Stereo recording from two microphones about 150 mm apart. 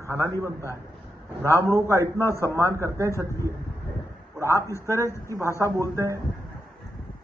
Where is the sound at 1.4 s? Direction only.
20° left (ahead or behind).